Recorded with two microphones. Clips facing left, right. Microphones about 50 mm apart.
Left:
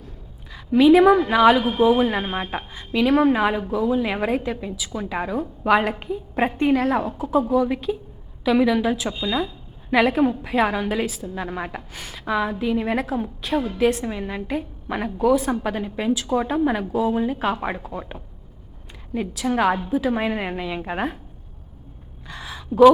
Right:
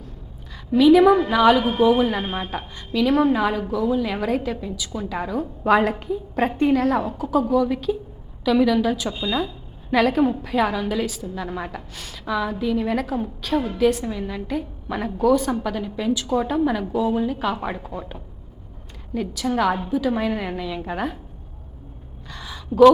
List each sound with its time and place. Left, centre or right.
0.7 s a woman's voice: left
1.1 s a woman's voice: centre
5.6 s a woman's voice: centre
6.0 s a woman's voice: centre
15.6 s a woman's voice: left
17.2 s a woman's voice: left
17.9 s a woman's voice: centre